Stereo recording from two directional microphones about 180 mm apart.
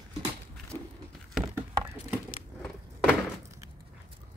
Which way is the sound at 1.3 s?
Centre (ahead or behind).